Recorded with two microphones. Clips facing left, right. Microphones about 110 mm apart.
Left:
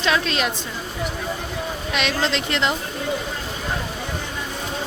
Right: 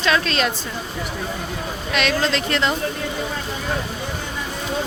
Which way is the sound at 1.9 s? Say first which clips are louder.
Right 3 dB; 20° left (ahead or behind).